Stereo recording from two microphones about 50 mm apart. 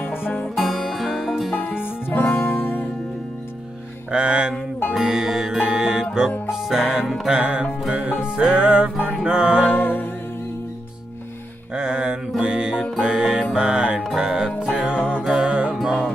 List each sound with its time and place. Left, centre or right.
0.0 s music: left
0.6 s music: centre
1.5 s music: left
4.1 s mantra: centre
4.9 s music: centre
7.3 s music: centre
9.7 s music: left
11.7 s music: centre